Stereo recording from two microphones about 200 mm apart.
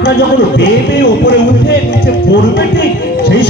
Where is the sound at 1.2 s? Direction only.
50° left (ahead or behind).